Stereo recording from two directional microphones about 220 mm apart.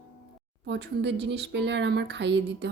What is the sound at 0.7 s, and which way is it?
Speech, 50° right (ahead or behind).